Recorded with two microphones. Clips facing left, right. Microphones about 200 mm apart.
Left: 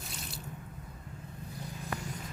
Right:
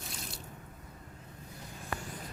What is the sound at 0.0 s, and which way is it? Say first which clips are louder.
Drip: even; centre (ahead or behind).